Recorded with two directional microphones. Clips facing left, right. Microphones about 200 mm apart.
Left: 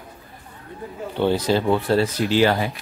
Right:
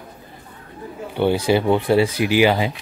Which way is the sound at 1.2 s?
10° right (ahead or behind).